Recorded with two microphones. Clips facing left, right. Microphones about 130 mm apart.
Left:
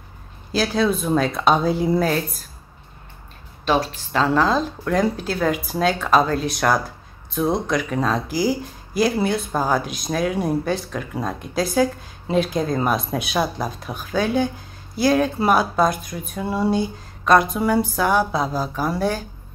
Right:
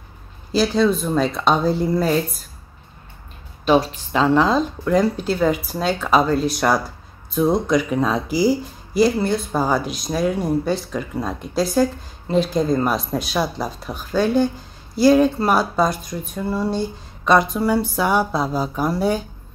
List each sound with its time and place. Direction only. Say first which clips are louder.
0.6 s speech: right 3 dB; 5° left (ahead or behind)
3.6 s a woman's voice: right 4 dB; 5° right (ahead or behind)